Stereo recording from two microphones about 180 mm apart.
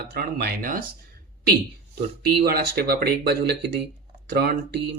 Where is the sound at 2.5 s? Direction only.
60° right (ahead or behind).